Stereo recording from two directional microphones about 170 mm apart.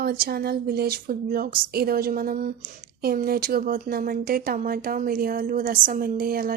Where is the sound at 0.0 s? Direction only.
65° right (ahead or behind).